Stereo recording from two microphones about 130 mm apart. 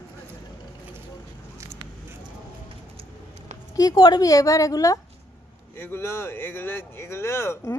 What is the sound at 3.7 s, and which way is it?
A woman's voice, 25° left (ahead or behind).